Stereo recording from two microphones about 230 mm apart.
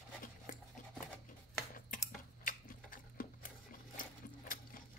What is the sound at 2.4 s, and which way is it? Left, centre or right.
Tick-tock, left.